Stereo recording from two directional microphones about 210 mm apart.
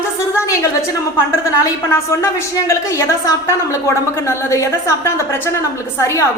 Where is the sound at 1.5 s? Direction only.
15° left (ahead or behind).